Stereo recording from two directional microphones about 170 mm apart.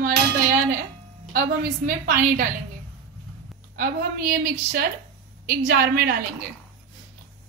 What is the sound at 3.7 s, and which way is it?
Speech, 55° right (ahead or behind).